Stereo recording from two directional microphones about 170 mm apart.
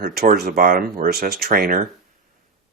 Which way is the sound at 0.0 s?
65° right (ahead or behind).